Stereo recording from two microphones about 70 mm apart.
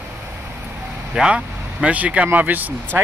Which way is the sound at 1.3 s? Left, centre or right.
Centre.